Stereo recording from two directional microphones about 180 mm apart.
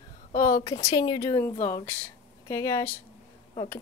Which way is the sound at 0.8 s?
25° left (ahead or behind).